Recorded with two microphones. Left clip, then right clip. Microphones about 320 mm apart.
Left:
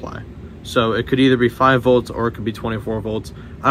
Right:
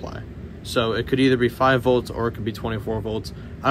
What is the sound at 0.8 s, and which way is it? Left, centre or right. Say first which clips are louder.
Speech: left 4 dB; left.